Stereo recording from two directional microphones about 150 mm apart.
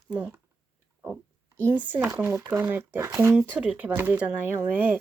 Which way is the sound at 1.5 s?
15° right (ahead or behind).